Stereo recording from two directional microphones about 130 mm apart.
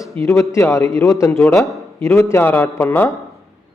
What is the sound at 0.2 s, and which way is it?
A man's voice, 25° left (ahead or behind).